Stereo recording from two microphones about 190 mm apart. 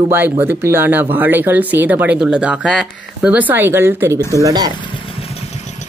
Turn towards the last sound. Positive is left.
turn(degrees=-20)  # may be behind; listen again after turning